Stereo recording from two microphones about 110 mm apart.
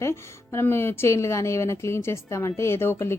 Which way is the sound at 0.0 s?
25° left (ahead or behind).